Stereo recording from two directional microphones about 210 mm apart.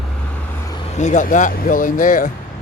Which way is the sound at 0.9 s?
35° left (ahead or behind).